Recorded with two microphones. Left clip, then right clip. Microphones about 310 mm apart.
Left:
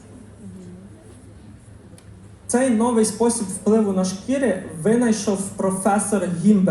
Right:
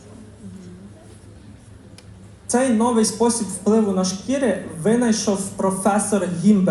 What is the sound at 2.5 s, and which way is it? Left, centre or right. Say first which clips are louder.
Speech: right 1 dB; centre.